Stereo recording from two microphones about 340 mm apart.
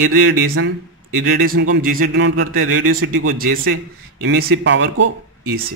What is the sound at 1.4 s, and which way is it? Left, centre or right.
A man's voice, right.